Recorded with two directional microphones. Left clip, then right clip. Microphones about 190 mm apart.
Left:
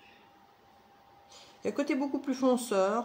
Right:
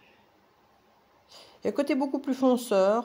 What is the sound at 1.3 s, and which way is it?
Speech, 50° right (ahead or behind).